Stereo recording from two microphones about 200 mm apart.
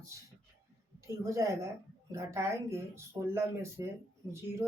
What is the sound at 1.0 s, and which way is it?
Speech, 15° right (ahead or behind).